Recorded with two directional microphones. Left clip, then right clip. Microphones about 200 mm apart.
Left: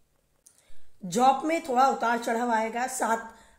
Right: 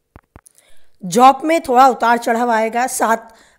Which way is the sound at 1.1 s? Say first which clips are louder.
Right 12 dB; 45° right (ahead or behind).